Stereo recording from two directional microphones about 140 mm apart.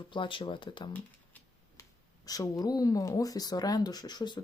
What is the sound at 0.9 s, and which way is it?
Shuffling cards, 15° left (ahead or behind).